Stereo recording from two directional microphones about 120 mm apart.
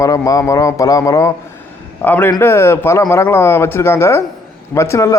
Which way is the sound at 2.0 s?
15° left (ahead or behind).